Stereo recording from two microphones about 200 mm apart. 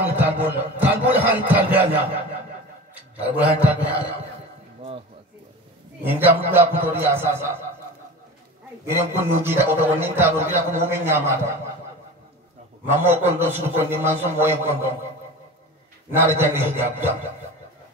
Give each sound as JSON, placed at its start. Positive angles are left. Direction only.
{"t": 0.0, "sound": "a man's voice", "side_deg": -10}
{"t": 6.0, "sound": "a man's voice", "side_deg": -10}
{"t": 8.8, "sound": "a man's voice", "side_deg": -10}
{"t": 12.9, "sound": "a man's voice", "side_deg": -10}
{"t": 16.1, "sound": "a man's voice", "side_deg": -10}